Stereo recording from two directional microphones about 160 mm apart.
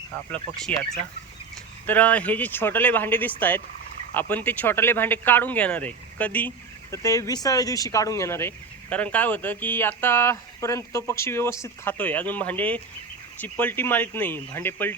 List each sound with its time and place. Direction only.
0.3 s speech: 10° left (ahead or behind)
1.9 s speech: 10° left (ahead or behind)